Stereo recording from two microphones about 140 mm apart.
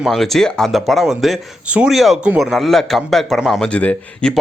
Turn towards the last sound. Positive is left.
turn(degrees=10)  # may be behind; listen again after turning